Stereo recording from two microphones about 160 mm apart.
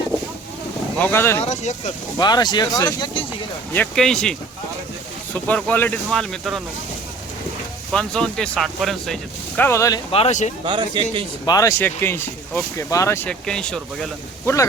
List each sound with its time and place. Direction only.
0.9 s speech: 15° left (ahead or behind)
1.5 s speech: 45° left (ahead or behind)
2.1 s speech: 25° left (ahead or behind)
3.8 s speech: 5° left (ahead or behind)
7.9 s speech: 5° left (ahead or behind)
9.6 s speech: 15° left (ahead or behind)
10.1 s speech: 40° left (ahead or behind)
10.7 s speech: 30° right (ahead or behind)
11.4 s speech: 20° left (ahead or behind)
13.2 s speech: 5° left (ahead or behind)
14.4 s speech: 20° left (ahead or behind)